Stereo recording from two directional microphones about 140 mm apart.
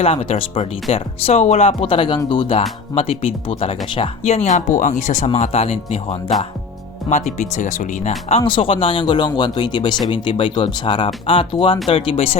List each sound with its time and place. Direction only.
0.0 s speech: 40° left (ahead or behind)
4.8 s speech: 65° left (ahead or behind); by 6.3 s 45° left (ahead or behind)
7.1 s speech: 60° left (ahead or behind)
8.3 s speech: 40° left (ahead or behind)